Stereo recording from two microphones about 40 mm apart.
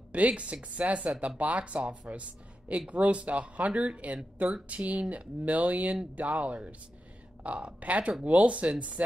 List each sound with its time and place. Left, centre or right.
0.1 s speech: right